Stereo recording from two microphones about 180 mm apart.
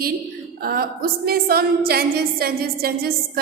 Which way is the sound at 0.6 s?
55° right (ahead or behind).